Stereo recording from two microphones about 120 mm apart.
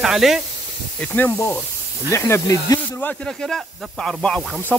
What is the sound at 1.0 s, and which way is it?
Speech, 15° left (ahead or behind).